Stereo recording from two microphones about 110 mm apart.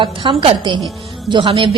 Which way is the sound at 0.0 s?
50° right (ahead or behind).